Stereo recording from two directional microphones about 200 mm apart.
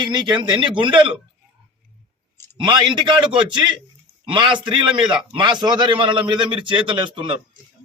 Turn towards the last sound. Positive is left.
turn(degrees=-25)  # may be behind; listen again after turning